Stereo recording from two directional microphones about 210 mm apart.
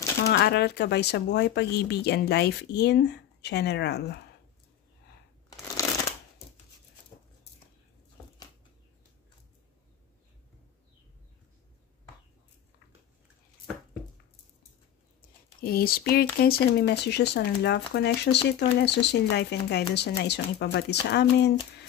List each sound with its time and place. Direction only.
0.2 s speech: 50° left (ahead or behind)
15.6 s speech: 45° left (ahead or behind)